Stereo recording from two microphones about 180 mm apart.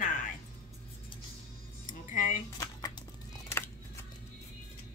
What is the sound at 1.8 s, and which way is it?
Music, 45° left (ahead or behind).